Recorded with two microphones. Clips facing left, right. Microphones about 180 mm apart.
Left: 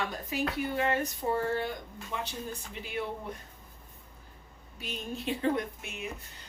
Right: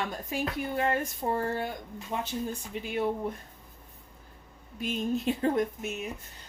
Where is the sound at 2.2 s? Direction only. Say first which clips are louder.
Right 5 dB; 45° right (ahead or behind).